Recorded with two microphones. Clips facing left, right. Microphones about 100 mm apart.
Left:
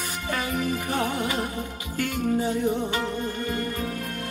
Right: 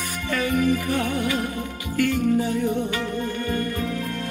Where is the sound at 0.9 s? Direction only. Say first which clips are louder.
Right 2 dB; 25° left (ahead or behind).